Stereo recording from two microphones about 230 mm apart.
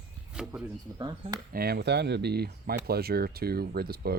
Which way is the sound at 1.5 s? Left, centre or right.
Right.